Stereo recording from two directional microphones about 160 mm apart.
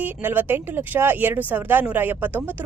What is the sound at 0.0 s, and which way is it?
Speech, 10° right (ahead or behind).